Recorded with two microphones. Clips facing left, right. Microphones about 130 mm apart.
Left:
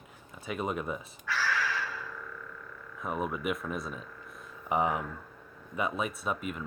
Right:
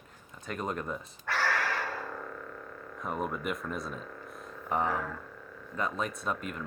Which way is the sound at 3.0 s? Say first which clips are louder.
Left 1 dB; 5° left (ahead or behind).